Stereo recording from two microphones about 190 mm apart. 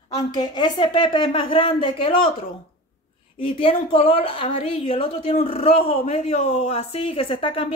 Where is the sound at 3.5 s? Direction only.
30° left (ahead or behind).